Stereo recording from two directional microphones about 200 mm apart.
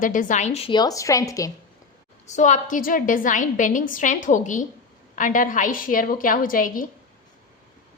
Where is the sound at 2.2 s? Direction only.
35° left (ahead or behind).